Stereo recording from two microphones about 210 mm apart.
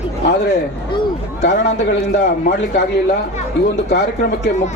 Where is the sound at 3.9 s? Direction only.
55° left (ahead or behind).